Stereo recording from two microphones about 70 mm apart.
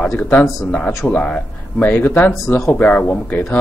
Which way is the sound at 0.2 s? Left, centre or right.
Left.